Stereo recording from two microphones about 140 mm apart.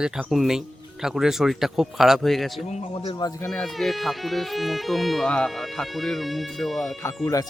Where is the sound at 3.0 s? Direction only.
25° left (ahead or behind).